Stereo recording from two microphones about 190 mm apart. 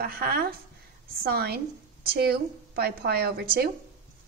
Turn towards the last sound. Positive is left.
turn(degrees=-55)  # may be behind; listen again after turning